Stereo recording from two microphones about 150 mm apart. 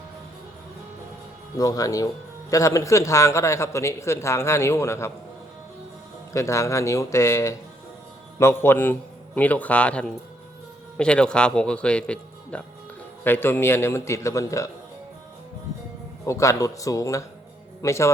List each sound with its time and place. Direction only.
1.5 s a man's voice: 25° left (ahead or behind)
6.3 s a man's voice: 20° left (ahead or behind)
16.2 s a man's voice: 20° left (ahead or behind)